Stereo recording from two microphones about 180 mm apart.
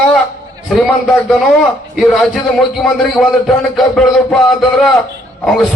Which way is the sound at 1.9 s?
Centre (ahead or behind).